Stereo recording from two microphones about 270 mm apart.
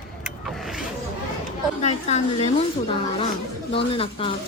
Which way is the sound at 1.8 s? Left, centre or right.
Left.